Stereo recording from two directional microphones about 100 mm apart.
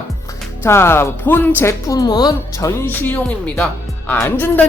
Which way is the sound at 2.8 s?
20° left (ahead or behind).